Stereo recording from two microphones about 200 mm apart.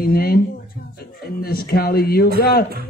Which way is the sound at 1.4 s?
50° left (ahead or behind).